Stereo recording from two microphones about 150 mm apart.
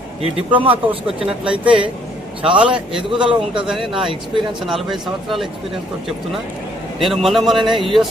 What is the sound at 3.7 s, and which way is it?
A man's voice, centre (ahead or behind).